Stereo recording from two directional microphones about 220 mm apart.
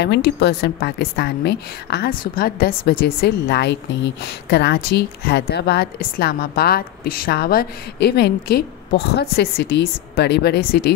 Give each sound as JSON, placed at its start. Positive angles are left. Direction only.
{"t": 0.0, "sound": "a woman's voice", "side_deg": 50}